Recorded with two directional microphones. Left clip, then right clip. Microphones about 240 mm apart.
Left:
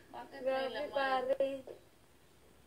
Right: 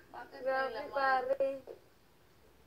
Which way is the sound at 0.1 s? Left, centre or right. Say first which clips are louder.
Right 1 dB; left.